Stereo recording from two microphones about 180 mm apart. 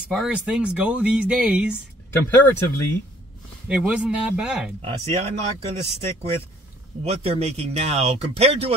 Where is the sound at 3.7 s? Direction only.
5° right (ahead or behind).